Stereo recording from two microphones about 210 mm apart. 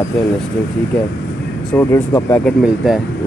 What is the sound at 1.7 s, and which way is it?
Speech, 15° left (ahead or behind).